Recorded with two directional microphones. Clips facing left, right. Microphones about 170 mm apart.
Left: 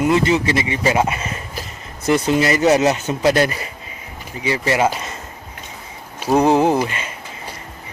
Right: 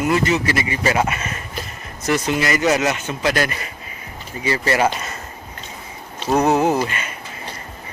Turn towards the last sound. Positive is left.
turn(degrees=25)  # may be behind; listen again after turning